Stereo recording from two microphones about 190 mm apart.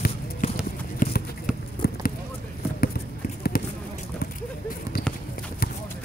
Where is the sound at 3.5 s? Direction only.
50° left (ahead or behind).